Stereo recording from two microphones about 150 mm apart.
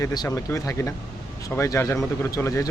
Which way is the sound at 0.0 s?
25° left (ahead or behind).